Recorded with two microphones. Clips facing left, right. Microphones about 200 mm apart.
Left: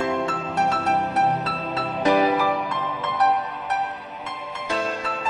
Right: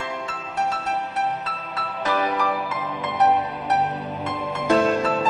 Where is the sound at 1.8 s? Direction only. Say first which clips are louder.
Left 5 dB; 15° left (ahead or behind).